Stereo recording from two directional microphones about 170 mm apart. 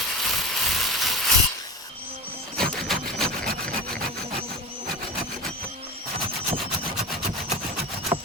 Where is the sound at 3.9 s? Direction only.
60° right (ahead or behind).